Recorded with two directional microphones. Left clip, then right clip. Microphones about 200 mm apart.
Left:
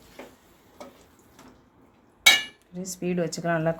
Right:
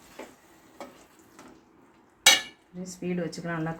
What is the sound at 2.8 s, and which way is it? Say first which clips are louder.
Speech: left 4 dB; 55° left (ahead or behind).